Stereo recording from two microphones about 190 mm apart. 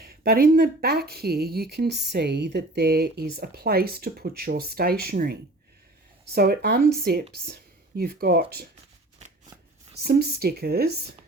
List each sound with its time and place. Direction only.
0.0 s speech: 55° right (ahead or behind)
10.0 s speech: 55° right (ahead or behind)